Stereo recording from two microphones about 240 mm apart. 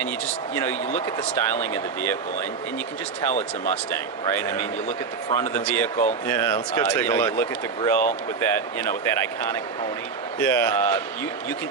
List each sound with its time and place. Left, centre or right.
0.5 s speech: centre
4.4 s speech: centre
10.4 s speech: centre